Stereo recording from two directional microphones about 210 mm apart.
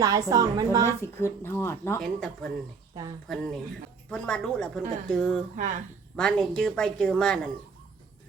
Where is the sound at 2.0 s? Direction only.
Centre (ahead or behind).